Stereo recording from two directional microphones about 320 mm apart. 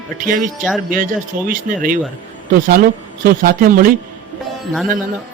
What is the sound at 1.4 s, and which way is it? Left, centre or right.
Speech, right.